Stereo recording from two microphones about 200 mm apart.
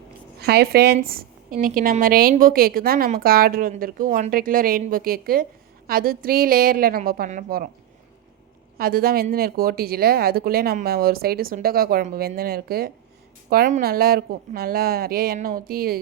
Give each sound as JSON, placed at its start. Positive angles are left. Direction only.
{"t": 0.3, "sound": "speech", "side_deg": -50}
{"t": 1.0, "sound": "a sound", "side_deg": -50}
{"t": 1.5, "sound": "speech", "side_deg": -45}
{"t": 8.8, "sound": "speech", "side_deg": -50}